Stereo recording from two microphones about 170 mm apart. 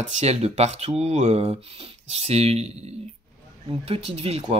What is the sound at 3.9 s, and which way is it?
Speech, 35° right (ahead or behind).